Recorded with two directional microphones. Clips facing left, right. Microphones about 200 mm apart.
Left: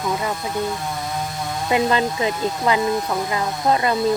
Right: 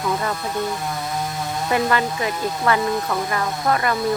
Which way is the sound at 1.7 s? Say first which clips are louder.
Left 2 dB; 25° left (ahead or behind).